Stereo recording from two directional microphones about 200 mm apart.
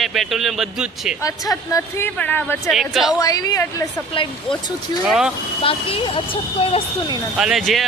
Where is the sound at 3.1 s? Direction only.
20° left (ahead or behind).